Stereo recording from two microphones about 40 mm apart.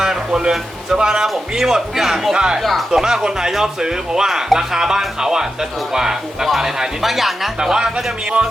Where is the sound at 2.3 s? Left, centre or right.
Centre.